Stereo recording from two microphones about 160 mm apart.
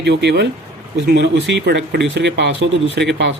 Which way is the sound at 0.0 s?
90° right.